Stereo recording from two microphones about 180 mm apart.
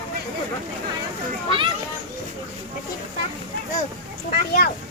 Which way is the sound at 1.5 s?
30° right (ahead or behind).